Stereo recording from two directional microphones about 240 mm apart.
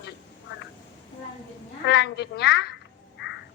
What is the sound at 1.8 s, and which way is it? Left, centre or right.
Speech, left.